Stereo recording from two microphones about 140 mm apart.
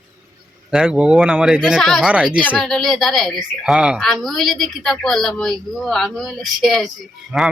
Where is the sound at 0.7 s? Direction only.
5° right (ahead or behind).